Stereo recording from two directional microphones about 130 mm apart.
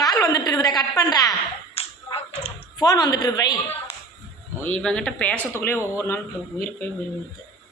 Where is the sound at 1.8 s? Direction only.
50° left (ahead or behind).